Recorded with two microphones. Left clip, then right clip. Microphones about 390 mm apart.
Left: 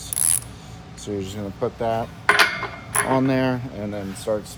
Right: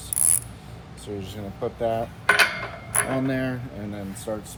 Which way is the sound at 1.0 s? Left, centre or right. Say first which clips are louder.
Left 6 dB; left.